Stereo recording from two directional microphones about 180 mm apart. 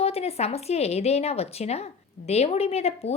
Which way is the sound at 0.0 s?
35° left (ahead or behind).